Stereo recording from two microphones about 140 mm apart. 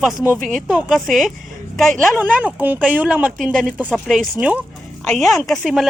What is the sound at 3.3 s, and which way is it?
Speech, centre (ahead or behind).